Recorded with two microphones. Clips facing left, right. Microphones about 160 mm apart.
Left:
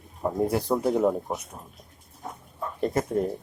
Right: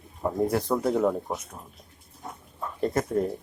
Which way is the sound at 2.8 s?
25° left (ahead or behind).